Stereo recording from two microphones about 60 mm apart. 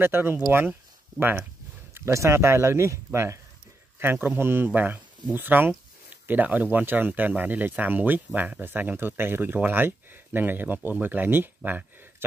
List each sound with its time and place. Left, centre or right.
0.0 s speech: right
2.0 s speech: right
4.0 s speech: right